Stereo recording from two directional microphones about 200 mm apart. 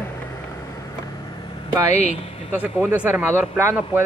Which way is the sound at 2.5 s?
10° right (ahead or behind).